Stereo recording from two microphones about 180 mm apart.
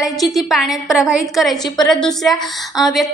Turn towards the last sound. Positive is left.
turn(degrees=0)  # may be behind; listen again after turning